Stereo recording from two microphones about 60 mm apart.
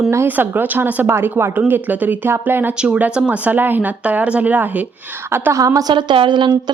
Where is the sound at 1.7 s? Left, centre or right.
Right.